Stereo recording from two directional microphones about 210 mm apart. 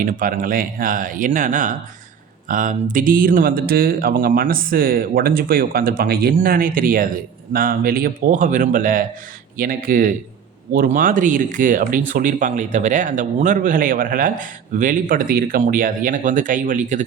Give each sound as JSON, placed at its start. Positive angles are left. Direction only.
{"t": 0.0, "sound": "speech", "side_deg": -40}